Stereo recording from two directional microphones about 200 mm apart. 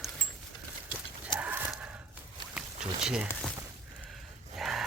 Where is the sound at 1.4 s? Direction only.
10° right (ahead or behind).